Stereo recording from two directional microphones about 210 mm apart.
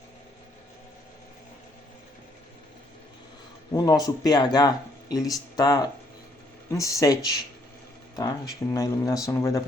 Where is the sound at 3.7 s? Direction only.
15° left (ahead or behind).